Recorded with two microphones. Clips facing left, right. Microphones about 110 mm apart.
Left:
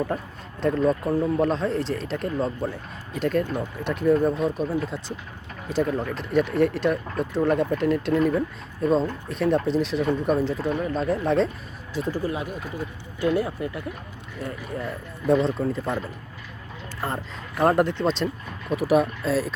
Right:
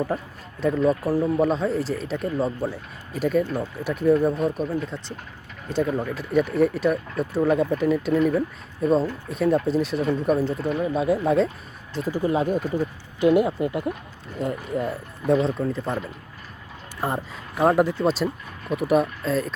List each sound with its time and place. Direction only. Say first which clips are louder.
0.1 s speech: right 1 dB; 5° right (ahead or behind)
12.1 s speech: right 8 dB; 20° right (ahead or behind)
12.4 s speech: right 9 dB; 40° right (ahead or behind)
13.1 s speech: right 5 dB; 20° right (ahead or behind)
15.3 s speech: even; centre (ahead or behind)
17.0 s speech: right 3 dB; 15° right (ahead or behind)
17.6 s speech: right 1 dB; centre (ahead or behind)